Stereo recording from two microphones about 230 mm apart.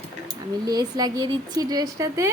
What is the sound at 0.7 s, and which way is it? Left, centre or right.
A woman's voice, centre.